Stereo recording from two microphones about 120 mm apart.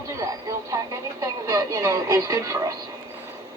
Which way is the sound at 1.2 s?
25° right (ahead or behind).